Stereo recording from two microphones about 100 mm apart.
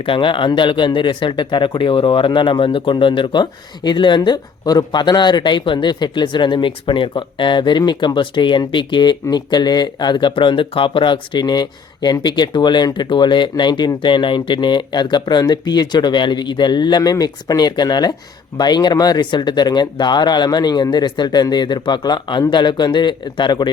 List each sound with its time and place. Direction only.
0.0 s speech: 60° left (ahead or behind)